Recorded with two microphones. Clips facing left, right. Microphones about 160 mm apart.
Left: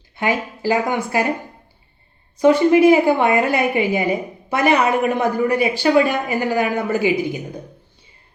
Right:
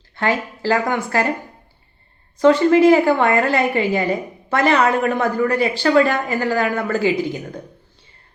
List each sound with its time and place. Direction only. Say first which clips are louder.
0.2 s a woman's voice: even; 15° left (ahead or behind)
2.4 s a woman's voice: even; 15° left (ahead or behind)